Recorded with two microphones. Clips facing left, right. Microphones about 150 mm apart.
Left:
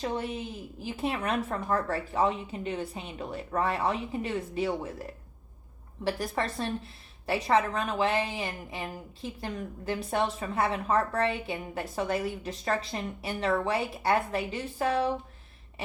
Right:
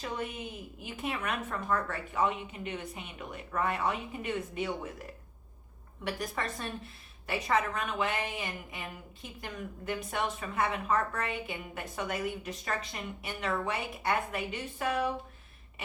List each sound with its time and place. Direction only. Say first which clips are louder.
0.0 s a woman's voice: left 5 dB; 30° left (ahead or behind)
6.1 s a woman's voice: left 5 dB; 30° left (ahead or behind)